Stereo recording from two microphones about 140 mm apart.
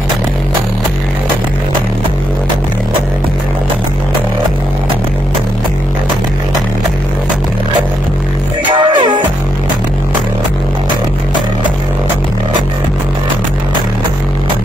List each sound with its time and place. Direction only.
8.7 s music: 35° right (ahead or behind)